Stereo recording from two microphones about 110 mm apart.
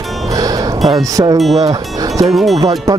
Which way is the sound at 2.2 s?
Centre (ahead or behind).